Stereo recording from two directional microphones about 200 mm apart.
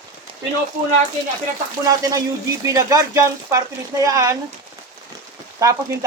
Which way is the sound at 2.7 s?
15° right (ahead or behind).